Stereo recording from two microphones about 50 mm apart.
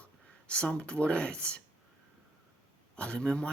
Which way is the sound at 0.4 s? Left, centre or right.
Left.